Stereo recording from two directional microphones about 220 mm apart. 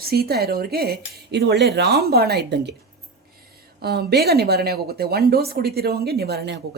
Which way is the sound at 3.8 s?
45° right (ahead or behind).